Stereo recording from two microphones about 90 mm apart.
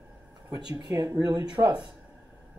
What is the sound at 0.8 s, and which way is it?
Speech, 35° right (ahead or behind).